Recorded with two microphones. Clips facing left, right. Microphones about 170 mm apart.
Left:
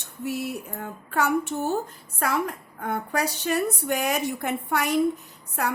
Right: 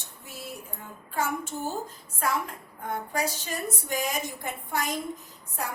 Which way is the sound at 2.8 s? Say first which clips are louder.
Left 3 dB; 65° left (ahead or behind).